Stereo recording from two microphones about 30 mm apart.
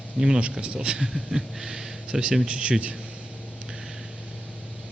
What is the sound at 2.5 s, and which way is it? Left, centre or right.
Speech, right.